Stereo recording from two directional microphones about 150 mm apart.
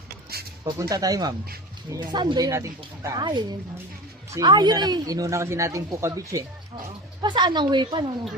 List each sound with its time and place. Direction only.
0.6 s speech: 25° right (ahead or behind)
2.5 s speech: 20° right (ahead or behind)
3.2 s speech: 30° right (ahead or behind)